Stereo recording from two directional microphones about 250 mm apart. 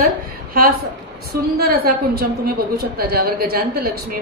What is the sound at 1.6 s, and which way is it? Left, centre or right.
A woman's voice, right.